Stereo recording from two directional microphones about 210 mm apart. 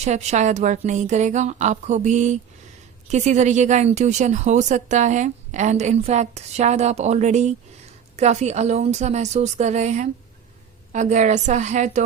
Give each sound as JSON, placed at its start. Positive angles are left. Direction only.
{"t": 0.0, "sound": "a woman's voice", "side_deg": -35}